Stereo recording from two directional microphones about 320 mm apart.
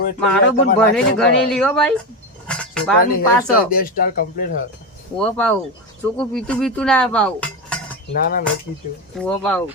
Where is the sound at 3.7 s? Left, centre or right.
Left.